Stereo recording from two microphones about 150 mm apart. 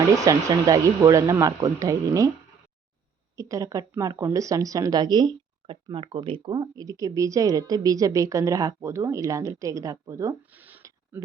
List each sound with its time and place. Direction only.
0.2 s a woman's voice: 25° right (ahead or behind)
3.3 s a woman's voice: 20° right (ahead or behind)